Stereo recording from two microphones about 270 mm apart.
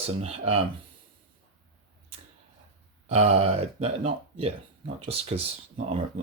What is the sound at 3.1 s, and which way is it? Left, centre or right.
Speech, right.